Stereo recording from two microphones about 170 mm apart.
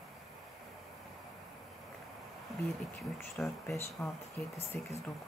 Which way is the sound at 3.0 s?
Centre (ahead or behind).